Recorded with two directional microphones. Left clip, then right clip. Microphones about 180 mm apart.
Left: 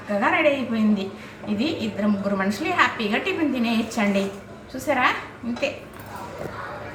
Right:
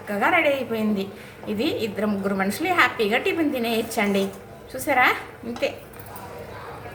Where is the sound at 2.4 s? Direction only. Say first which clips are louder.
Right 1 dB; 40° right (ahead or behind).